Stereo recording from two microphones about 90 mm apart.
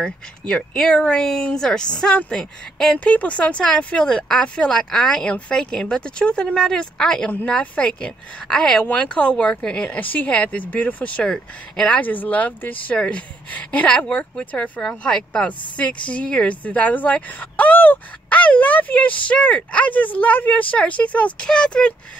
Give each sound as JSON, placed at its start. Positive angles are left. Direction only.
{"t": 0.0, "sound": "speech", "side_deg": 10}